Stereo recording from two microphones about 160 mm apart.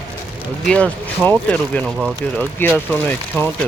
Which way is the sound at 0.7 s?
10° left (ahead or behind).